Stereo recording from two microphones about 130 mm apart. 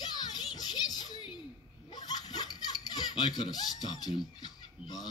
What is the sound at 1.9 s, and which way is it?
Giggle, 30° left (ahead or behind).